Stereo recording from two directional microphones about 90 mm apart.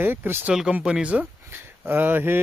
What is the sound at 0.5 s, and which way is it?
Speech, 10° right (ahead or behind).